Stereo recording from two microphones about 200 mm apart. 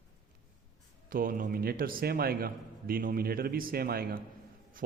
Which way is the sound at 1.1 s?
45° right (ahead or behind).